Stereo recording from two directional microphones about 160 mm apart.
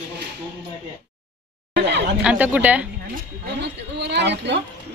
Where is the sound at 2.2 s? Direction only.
10° right (ahead or behind).